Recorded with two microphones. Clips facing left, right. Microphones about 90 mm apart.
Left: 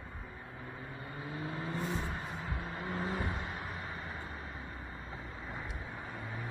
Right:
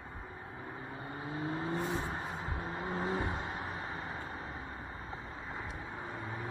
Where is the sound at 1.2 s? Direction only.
30° right (ahead or behind).